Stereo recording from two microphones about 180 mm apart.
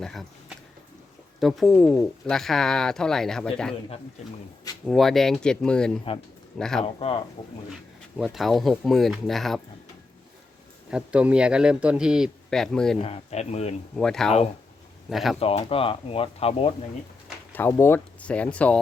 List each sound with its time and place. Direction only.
0.0 s speech: centre (ahead or behind)
1.4 s speech: centre (ahead or behind)
4.9 s speech: centre (ahead or behind)
8.1 s speech: centre (ahead or behind)
10.9 s speech: 5° right (ahead or behind)
13.0 s speech: 35° left (ahead or behind)
13.9 s speech: 5° left (ahead or behind)
15.4 s speech: 35° left (ahead or behind)
17.5 s speech: 10° left (ahead or behind)